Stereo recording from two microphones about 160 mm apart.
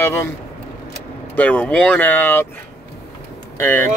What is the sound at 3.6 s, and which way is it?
Speech, 15° left (ahead or behind).